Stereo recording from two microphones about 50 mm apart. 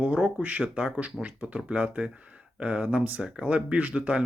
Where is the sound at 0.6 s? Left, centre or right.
Centre.